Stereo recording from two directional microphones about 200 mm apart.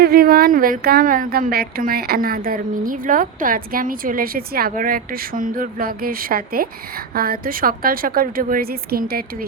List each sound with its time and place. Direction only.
0.0 s speech: 50° right (ahead or behind)